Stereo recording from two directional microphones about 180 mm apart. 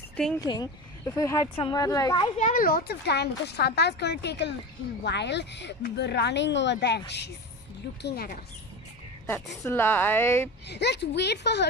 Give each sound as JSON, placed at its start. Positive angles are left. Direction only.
{"t": 0.4, "sound": "speech", "side_deg": 20}
{"t": 2.3, "sound": "speech", "side_deg": 45}
{"t": 8.0, "sound": "speech", "side_deg": 55}
{"t": 9.2, "sound": "speech", "side_deg": 15}
{"t": 10.7, "sound": "speech", "side_deg": 70}